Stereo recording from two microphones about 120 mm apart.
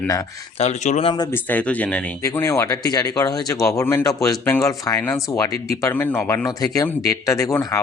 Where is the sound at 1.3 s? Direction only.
15° left (ahead or behind).